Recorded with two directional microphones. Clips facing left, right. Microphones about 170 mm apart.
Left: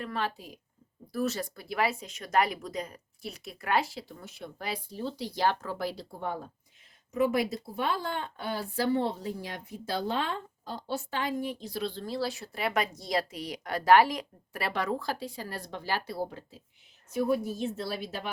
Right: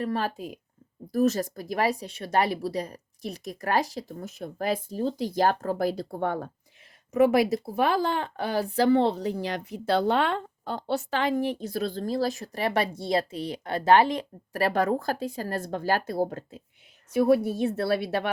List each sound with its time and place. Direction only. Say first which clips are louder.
0.0 s speech: right 5 dB; 40° right (ahead or behind); by 6.5 s 65° right (ahead or behind)
7.1 s a woman's voice: right 7 dB; 80° right
11.6 s speech: right 5 dB; 45° right (ahead or behind)
17.2 s a woman's voice: right 7 dB; 75° right (ahead or behind)